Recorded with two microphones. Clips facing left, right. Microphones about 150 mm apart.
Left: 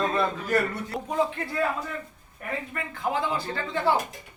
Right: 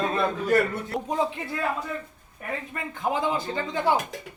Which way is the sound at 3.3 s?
15° right (ahead or behind).